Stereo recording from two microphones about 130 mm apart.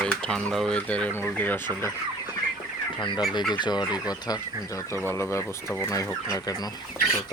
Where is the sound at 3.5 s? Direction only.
35° left (ahead or behind).